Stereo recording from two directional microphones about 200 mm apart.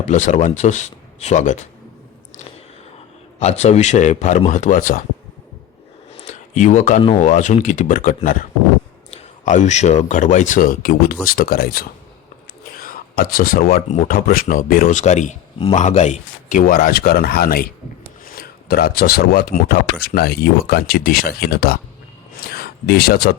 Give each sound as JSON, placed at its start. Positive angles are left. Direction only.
{"t": 0.0, "sound": "speech", "side_deg": 35}
{"t": 3.4, "sound": "speech", "side_deg": 35}
{"t": 6.1, "sound": "a sound", "side_deg": 35}
{"t": 7.0, "sound": "speech", "side_deg": 30}
{"t": 7.3, "sound": "speech", "side_deg": 40}